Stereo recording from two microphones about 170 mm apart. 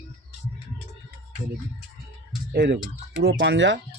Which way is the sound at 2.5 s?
85° right.